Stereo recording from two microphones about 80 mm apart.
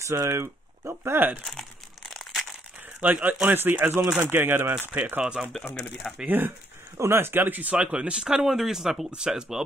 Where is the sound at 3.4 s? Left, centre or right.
Right.